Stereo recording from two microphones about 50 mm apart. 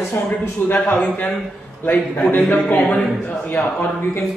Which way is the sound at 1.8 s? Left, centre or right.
Left.